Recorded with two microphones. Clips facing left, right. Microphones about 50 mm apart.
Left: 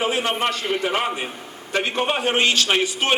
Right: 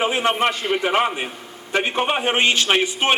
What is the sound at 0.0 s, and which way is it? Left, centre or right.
A man's voice, right.